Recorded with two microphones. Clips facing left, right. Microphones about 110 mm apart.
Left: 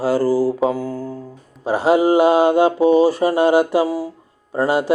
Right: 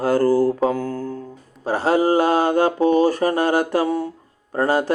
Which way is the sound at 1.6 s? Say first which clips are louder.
Left 3 dB; 15° left (ahead or behind).